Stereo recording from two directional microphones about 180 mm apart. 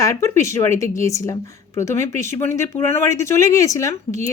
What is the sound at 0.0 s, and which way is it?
A woman's voice, 15° left (ahead or behind).